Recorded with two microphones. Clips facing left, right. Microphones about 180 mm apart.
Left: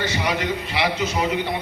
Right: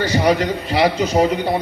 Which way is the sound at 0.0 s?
40° right (ahead or behind).